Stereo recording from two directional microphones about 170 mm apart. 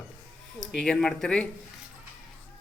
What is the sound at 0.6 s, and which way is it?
Speech, 5° left (ahead or behind).